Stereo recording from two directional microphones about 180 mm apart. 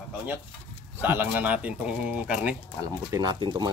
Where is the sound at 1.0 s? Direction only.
10° right (ahead or behind).